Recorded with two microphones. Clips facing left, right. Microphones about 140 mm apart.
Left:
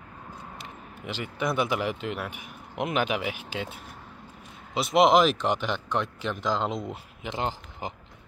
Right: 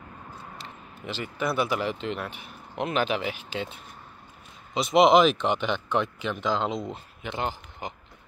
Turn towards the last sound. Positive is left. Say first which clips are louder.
# even
turn(degrees=25)  # may be behind; listen again after turning